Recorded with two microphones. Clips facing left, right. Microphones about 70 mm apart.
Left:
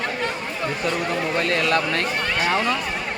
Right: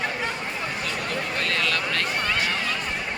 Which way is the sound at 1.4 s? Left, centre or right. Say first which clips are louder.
Left 5 dB; left.